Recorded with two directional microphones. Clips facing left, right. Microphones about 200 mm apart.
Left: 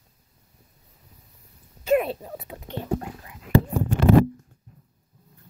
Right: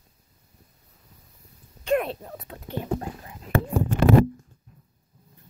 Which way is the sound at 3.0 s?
30° right (ahead or behind).